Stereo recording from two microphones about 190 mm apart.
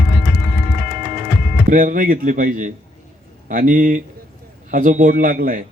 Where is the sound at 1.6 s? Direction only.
45° right (ahead or behind).